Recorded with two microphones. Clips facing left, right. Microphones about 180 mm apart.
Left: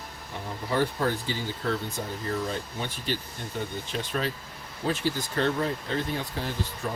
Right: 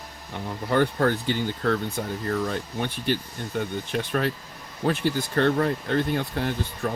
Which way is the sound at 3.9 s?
55° right (ahead or behind).